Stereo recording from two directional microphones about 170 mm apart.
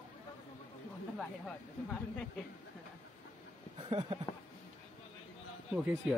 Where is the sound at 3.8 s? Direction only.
30° right (ahead or behind).